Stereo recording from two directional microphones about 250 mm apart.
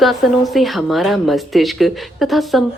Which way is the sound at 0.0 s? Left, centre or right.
Centre.